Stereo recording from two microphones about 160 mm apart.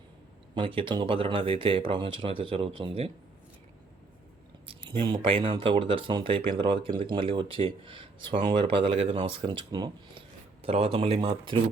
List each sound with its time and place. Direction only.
0.5 s speech: 30° right (ahead or behind)
4.6 s speech: 35° right (ahead or behind)